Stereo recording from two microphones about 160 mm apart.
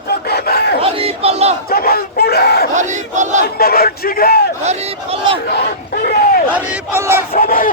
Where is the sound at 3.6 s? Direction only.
75° left (ahead or behind).